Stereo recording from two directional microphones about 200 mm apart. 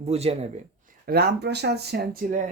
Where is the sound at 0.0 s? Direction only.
30° right (ahead or behind).